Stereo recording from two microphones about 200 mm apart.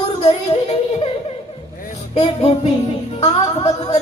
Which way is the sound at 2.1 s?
30° left (ahead or behind).